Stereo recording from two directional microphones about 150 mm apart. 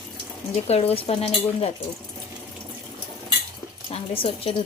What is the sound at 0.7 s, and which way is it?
Speech, 40° left (ahead or behind).